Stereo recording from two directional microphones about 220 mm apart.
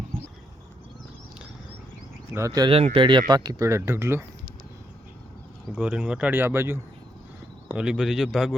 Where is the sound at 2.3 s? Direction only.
15° right (ahead or behind).